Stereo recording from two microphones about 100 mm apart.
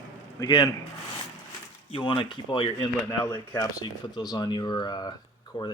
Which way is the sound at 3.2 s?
30° left (ahead or behind).